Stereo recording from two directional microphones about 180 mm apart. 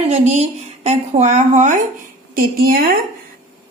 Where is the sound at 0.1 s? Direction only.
40° right (ahead or behind).